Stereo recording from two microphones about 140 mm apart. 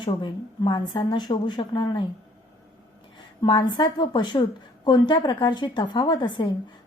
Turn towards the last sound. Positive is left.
turn(degrees=35)  # may be behind; listen again after turning